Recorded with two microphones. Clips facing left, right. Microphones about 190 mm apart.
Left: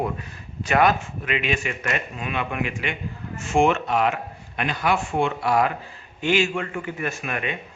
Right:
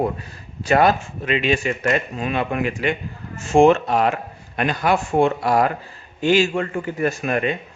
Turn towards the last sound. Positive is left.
turn(degrees=-35)  # may be behind; listen again after turning